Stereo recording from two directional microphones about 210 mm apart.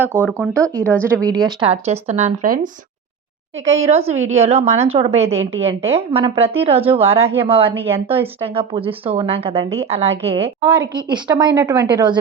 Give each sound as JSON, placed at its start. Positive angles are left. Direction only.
{"t": 0.0, "sound": "speech", "side_deg": 10}
{"t": 0.3, "sound": "speech", "side_deg": -15}
{"t": 0.8, "sound": "a woman's voice", "side_deg": 5}
{"t": 1.0, "sound": "a woman's voice", "side_deg": -15}
{"t": 3.8, "sound": "a woman's voice", "side_deg": -30}